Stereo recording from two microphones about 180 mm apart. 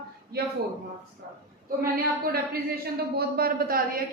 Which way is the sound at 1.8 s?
55° right (ahead or behind).